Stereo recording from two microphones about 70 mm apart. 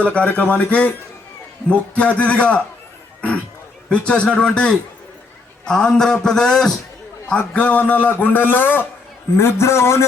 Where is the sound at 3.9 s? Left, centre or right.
Centre.